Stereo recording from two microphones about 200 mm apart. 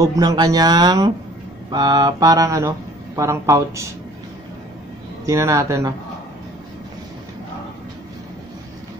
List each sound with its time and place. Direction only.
0.0 s speech: 15° right (ahead or behind)
1.7 s mantra: 20° right (ahead or behind)
5.2 s mantra: 15° right (ahead or behind)